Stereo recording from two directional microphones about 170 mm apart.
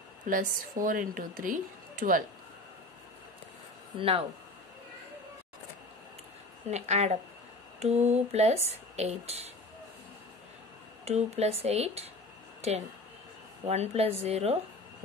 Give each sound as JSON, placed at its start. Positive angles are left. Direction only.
{"t": 0.3, "sound": "a woman's voice", "side_deg": -50}
{"t": 4.0, "sound": "speech", "side_deg": -35}
{"t": 6.7, "sound": "speech", "side_deg": -40}
{"t": 11.1, "sound": "speech", "side_deg": -40}
{"t": 13.7, "sound": "speech", "side_deg": -40}